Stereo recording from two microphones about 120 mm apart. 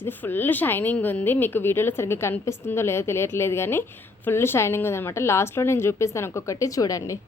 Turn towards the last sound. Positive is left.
turn(degrees=30)  # may be behind; listen again after turning